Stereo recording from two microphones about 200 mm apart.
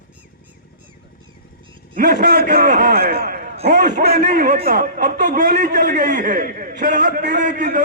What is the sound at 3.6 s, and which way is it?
A man's voice, 40° right (ahead or behind).